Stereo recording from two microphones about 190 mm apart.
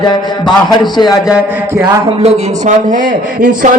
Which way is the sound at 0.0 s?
20° left (ahead or behind).